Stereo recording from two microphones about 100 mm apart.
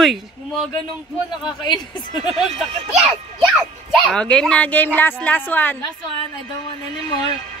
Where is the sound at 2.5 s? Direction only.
90° right.